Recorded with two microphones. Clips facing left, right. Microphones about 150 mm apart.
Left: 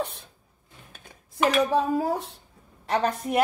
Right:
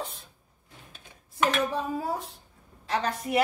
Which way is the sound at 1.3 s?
90° left.